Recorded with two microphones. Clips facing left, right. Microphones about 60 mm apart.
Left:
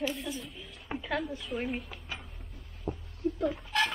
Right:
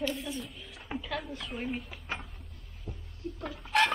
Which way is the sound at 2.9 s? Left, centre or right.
Left.